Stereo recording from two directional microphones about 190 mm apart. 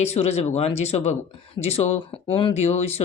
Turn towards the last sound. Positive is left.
turn(degrees=35)  # may be behind; listen again after turning